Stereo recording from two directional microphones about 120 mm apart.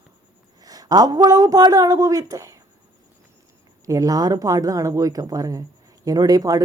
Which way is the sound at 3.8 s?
30° right (ahead or behind).